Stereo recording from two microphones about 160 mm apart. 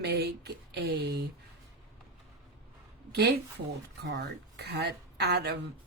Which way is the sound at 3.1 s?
90° right.